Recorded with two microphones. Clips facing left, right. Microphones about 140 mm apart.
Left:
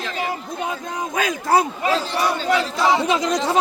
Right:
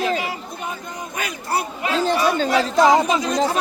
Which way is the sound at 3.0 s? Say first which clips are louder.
Left 1 dB; 90° left.